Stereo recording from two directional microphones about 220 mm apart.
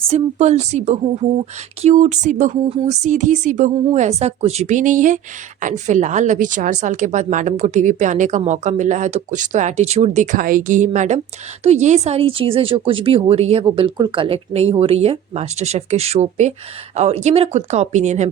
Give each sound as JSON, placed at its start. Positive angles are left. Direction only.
{"t": 0.1, "sound": "speech", "side_deg": -30}